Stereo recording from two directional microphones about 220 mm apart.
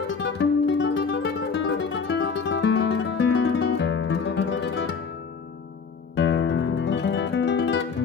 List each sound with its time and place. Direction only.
0.2 s music: 55° left (ahead or behind)
6.1 s music: 55° left (ahead or behind)